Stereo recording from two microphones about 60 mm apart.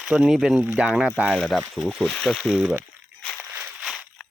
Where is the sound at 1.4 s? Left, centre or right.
Centre.